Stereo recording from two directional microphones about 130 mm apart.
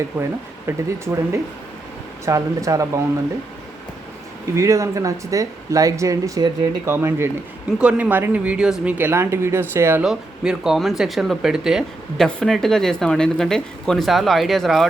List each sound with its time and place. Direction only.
0.1 s speech: 15° right (ahead or behind)
4.5 s speech: 25° right (ahead or behind)
10.0 s speech: 5° right (ahead or behind)